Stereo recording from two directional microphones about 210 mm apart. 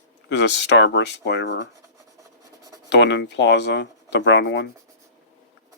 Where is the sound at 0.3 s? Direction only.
55° left (ahead or behind).